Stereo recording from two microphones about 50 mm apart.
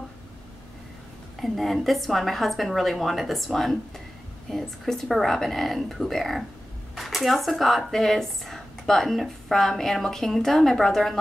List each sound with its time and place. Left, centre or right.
1.4 s speech: centre